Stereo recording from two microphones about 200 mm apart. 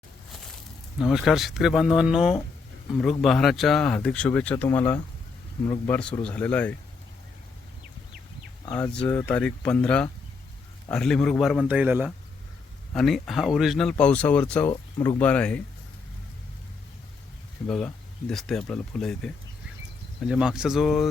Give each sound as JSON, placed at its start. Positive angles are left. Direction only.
{"t": 0.9, "sound": "speech", "side_deg": 0}
{"t": 8.7, "sound": "speech", "side_deg": 5}
{"t": 14.7, "sound": "speech", "side_deg": 20}
{"t": 15.2, "sound": "speech", "side_deg": 5}
{"t": 17.7, "sound": "speech", "side_deg": 5}